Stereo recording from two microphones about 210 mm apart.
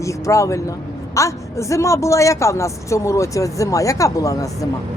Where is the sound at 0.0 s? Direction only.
15° left (ahead or behind).